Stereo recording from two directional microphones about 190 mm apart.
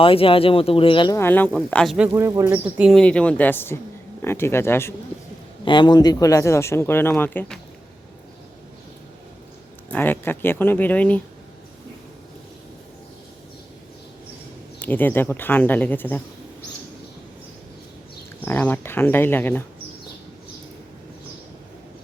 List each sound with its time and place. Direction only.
0.0 s speech: 30° left (ahead or behind); by 2.0 s centre (ahead or behind)
2.1 s speech: 15° right (ahead or behind); by 4.9 s 15° left (ahead or behind)
5.6 s speech: 25° left (ahead or behind); by 7.6 s 5° left (ahead or behind)
9.9 s speech: 10° left (ahead or behind)
14.8 s speech: 10° left (ahead or behind)
18.4 s speech: 10° left (ahead or behind)